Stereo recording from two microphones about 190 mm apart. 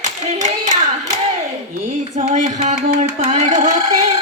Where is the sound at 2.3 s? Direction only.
40° right (ahead or behind).